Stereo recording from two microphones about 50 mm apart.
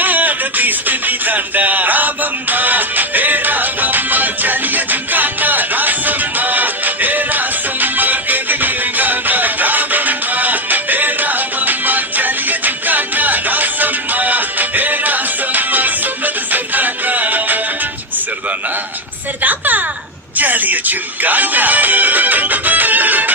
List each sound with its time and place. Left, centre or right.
0.0 s music: right
19.4 s a sound: right
20.3 s music: right